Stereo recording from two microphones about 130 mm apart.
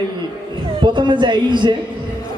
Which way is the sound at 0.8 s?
35° right (ahead or behind).